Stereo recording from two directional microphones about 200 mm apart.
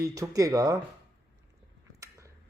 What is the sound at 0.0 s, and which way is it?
Speech, 15° right (ahead or behind).